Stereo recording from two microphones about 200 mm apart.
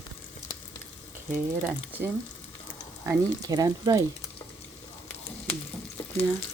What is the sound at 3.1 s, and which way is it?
Speech, 15° right (ahead or behind).